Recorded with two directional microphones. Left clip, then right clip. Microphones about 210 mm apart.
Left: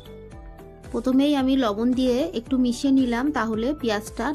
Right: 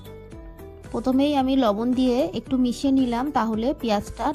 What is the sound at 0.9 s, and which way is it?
A woman's voice, 35° right (ahead or behind).